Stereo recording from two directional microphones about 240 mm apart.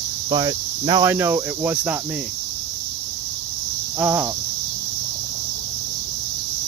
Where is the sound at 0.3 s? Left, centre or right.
Centre.